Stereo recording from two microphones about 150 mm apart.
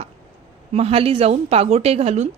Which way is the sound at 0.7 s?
45° right (ahead or behind).